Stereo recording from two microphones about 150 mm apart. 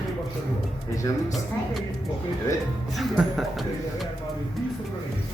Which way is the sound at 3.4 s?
Centre (ahead or behind).